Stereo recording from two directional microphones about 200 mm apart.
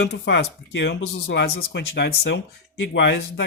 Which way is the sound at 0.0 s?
60° left (ahead or behind).